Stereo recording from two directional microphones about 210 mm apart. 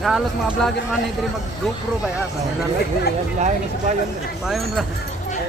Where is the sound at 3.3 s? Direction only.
35° right (ahead or behind).